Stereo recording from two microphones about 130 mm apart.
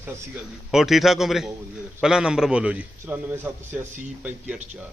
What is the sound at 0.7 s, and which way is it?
A man's voice, 5° right (ahead or behind).